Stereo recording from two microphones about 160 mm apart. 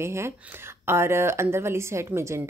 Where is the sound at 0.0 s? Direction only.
15° right (ahead or behind).